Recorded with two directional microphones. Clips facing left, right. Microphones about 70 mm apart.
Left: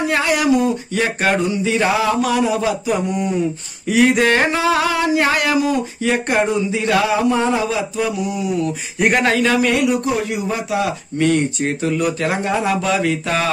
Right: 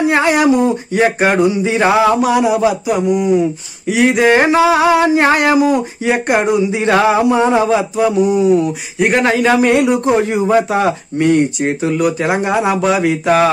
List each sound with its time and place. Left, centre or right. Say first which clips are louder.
0.0 s speech: right 5 dB; right
5.0 s speech: right 5 dB; right
6.8 s a sound: right 5 dB; right
7.2 s speech: right 4 dB; centre
7.5 s speech: right 6 dB; right
9.0 s speech: right 3 dB; centre
9.4 s speech: right 5 dB; right
10.7 s a sound: right 5 dB; right
11.1 s speech: right 3 dB; centre